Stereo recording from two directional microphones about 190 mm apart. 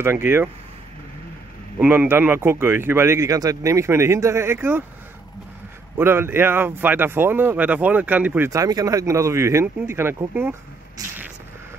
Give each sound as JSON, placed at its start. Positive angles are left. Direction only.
{"t": 0.0, "sound": "speech", "side_deg": -10}
{"t": 1.8, "sound": "speech", "side_deg": -10}
{"t": 5.9, "sound": "speech", "side_deg": -10}
{"t": 11.0, "sound": "a sound", "side_deg": -20}